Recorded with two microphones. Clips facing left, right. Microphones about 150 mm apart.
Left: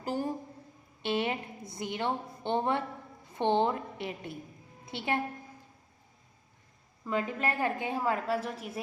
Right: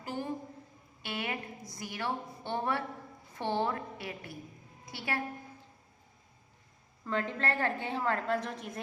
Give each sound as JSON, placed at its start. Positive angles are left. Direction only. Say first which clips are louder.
{"t": 0.0, "sound": "a woman's voice", "louder": "left 5 dB", "side_deg": 35}
{"t": 1.0, "sound": "a woman's voice", "louder": "left 6 dB", "side_deg": 25}
{"t": 7.0, "sound": "a woman's voice", "louder": "left 2 dB", "side_deg": 10}